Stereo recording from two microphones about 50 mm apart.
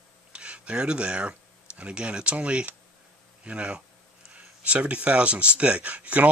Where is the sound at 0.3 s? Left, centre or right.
Right.